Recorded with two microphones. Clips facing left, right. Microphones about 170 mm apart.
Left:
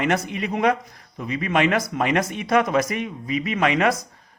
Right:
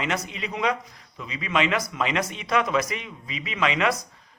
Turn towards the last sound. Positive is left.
turn(degrees=50)  # may be behind; listen again after turning